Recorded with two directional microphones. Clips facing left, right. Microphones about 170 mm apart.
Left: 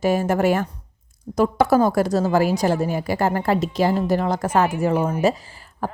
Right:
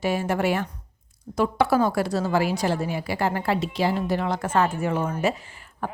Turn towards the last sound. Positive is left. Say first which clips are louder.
# left 4 dB
turn(degrees=35)  # may be behind; listen again after turning